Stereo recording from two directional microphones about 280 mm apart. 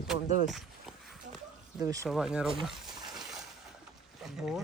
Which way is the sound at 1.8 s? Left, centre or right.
Centre.